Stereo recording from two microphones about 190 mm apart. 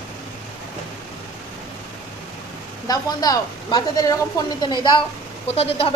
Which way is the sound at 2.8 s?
20° left (ahead or behind).